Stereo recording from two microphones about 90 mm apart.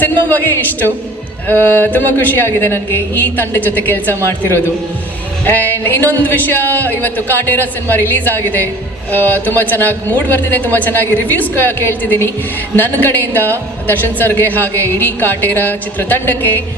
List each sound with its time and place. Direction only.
0.0 s speech: 20° left (ahead or behind)
5.5 s speech: 20° left (ahead or behind)